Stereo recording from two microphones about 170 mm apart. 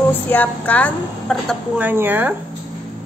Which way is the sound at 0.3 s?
10° left (ahead or behind).